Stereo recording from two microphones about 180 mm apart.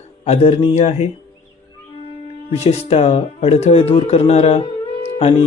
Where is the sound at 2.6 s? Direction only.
35° left (ahead or behind).